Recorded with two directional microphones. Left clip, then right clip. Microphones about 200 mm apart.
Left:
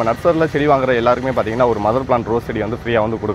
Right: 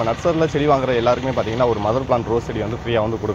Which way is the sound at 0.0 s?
45° left (ahead or behind).